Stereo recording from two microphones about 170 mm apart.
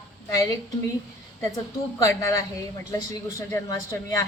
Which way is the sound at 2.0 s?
15° left (ahead or behind).